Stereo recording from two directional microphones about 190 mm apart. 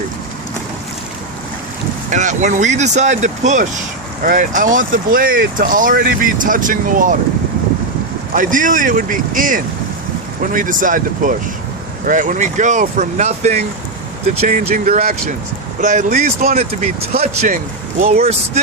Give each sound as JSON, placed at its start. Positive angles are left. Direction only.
{"t": 2.0, "sound": "speech", "side_deg": -40}
{"t": 8.3, "sound": "speech", "side_deg": -45}